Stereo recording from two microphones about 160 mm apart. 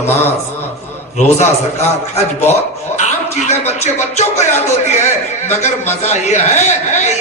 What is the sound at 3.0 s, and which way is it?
Speech, 45° left (ahead or behind).